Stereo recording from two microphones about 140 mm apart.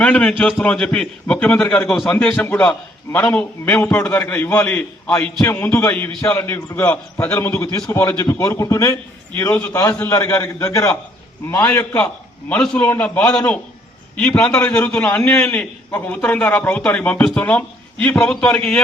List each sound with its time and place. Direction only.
0.0 s a man's voice: 10° left (ahead or behind)